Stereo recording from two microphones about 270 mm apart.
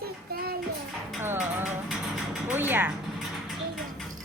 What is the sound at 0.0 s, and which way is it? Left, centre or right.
Child singing, right.